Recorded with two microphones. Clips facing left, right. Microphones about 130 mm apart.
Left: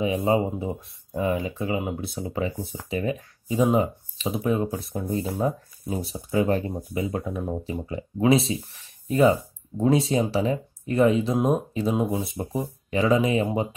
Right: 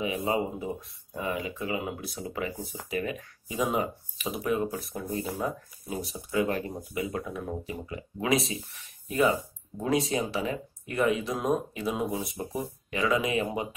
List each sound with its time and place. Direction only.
0.0 s speech: 30° left (ahead or behind)